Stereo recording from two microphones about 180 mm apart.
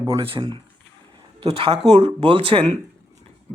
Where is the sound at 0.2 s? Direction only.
30° right (ahead or behind).